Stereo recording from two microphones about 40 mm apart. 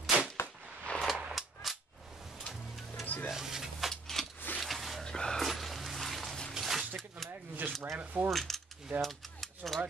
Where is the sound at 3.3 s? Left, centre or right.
Centre.